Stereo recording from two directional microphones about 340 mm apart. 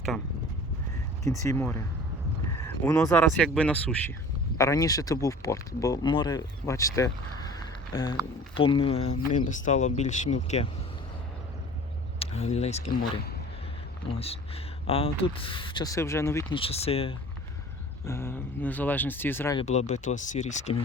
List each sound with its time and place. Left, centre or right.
1.2 s speech: centre
12.2 s speech: centre
19.6 s speech: centre